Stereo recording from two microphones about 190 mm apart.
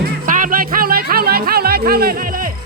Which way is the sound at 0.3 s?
45° right (ahead or behind).